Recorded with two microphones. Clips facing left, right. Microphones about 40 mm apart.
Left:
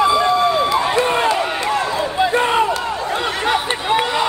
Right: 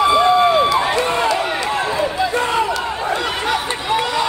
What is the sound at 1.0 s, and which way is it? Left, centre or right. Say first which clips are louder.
Run: left 1 dB; left.